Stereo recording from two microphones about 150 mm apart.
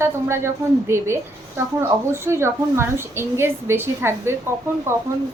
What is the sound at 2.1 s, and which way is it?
A woman's voice, 15° right (ahead or behind).